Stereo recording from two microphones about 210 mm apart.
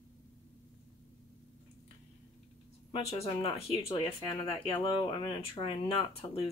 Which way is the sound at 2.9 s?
30° left (ahead or behind).